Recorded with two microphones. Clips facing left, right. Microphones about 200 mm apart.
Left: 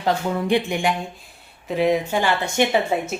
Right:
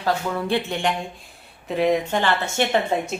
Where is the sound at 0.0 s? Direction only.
20° left (ahead or behind).